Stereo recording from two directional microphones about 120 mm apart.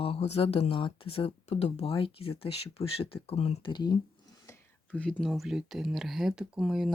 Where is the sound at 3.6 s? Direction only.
40° left (ahead or behind).